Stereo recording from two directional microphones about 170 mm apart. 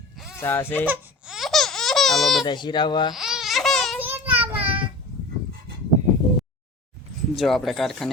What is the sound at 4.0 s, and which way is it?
Child singing, 10° right (ahead or behind).